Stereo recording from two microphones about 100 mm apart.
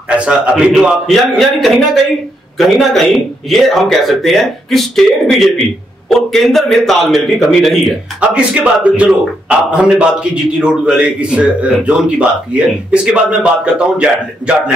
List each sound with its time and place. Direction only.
0.1 s a man's voice: 10° right (ahead or behind)
8.2 s a man's voice: 10° right (ahead or behind)